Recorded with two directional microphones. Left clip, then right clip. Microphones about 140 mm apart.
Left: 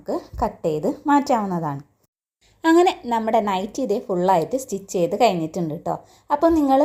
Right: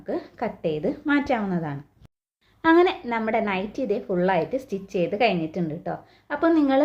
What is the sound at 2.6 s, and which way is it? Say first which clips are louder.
Speech: left 2 dB; 45° left (ahead or behind).